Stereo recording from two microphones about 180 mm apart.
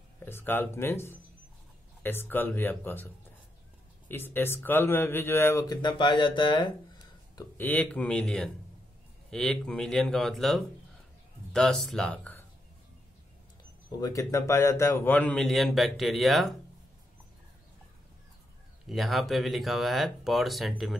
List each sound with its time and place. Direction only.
0.2 s a man's voice: 10° left (ahead or behind)
4.1 s a man's voice: 10° left (ahead or behind)
7.5 s a man's voice: 10° left (ahead or behind)
13.9 s a man's voice: 20° left (ahead or behind); by 16.5 s centre (ahead or behind)
18.9 s speech: centre (ahead or behind)